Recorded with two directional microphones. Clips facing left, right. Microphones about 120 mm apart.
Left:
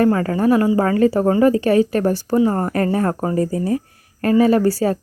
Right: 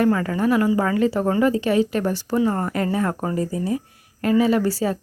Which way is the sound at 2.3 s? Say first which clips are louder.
Left 3 dB; 30° left (ahead or behind).